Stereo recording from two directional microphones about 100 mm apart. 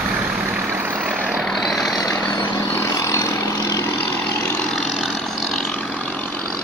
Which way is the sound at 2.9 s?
35° left (ahead or behind).